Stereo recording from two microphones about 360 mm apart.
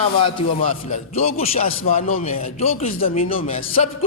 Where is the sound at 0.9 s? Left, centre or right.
Centre.